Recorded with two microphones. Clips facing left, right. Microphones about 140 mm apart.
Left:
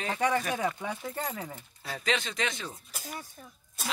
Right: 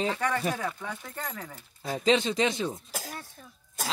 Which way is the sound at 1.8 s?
20° right (ahead or behind).